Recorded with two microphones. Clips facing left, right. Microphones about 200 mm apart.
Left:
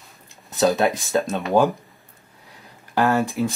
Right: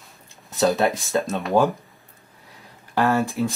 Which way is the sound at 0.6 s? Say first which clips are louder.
Left 1 dB; centre (ahead or behind).